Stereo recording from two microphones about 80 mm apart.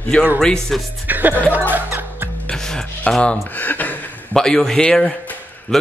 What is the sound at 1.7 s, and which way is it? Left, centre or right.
Music, right.